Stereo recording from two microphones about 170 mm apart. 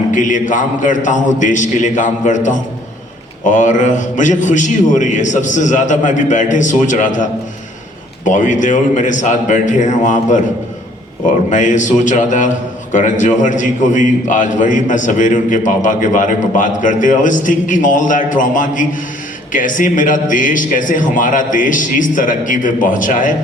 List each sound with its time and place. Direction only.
0.1 s a man's voice: 50° left (ahead or behind)
11.4 s a man's voice: 45° left (ahead or behind)